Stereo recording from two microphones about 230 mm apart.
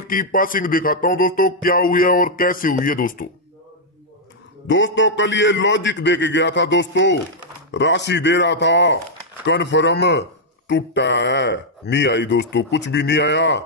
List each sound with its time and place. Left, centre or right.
0.1 s speech: left
4.6 s speech: left